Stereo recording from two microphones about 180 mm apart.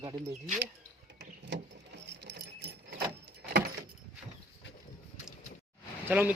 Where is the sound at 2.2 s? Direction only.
70° right (ahead or behind).